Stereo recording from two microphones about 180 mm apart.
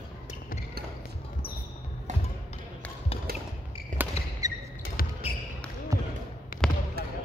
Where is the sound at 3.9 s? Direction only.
45° right (ahead or behind).